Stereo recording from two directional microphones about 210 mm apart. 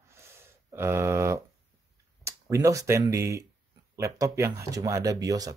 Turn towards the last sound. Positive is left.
turn(degrees=-15)  # may be behind; listen again after turning